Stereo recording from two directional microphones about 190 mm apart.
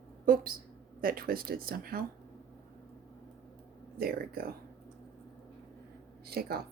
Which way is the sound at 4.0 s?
50° right (ahead or behind).